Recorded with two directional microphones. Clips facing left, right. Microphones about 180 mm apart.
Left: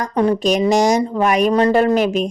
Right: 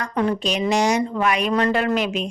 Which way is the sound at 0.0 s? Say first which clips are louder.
Left 6 dB; 35° left (ahead or behind).